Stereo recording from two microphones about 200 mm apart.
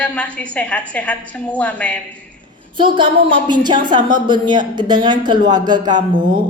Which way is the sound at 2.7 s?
25° right (ahead or behind).